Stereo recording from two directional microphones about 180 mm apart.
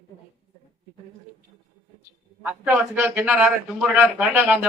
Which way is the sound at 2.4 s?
5° right (ahead or behind).